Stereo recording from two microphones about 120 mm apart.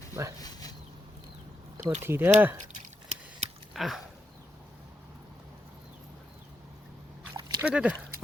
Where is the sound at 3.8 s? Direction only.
Centre (ahead or behind).